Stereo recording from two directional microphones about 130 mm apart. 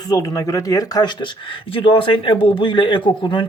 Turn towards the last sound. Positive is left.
turn(degrees=40)  # may be behind; listen again after turning